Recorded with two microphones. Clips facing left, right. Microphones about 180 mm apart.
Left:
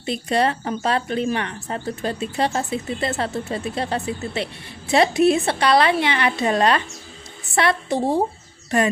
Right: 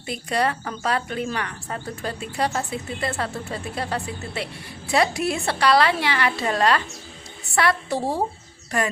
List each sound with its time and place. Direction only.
0.0 s a woman's voice: 25° left (ahead or behind)